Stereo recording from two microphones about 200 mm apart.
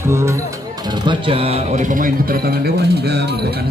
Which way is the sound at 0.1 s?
15° right (ahead or behind).